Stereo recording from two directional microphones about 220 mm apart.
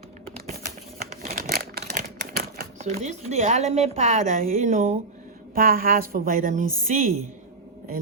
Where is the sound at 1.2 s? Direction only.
40° right (ahead or behind).